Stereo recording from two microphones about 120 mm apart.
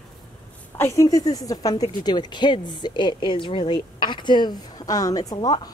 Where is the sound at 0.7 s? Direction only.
20° left (ahead or behind).